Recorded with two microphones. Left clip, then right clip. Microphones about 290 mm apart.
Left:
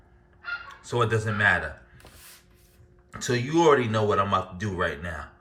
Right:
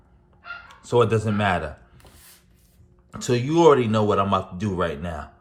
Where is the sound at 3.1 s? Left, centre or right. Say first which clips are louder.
Right 3 dB; centre.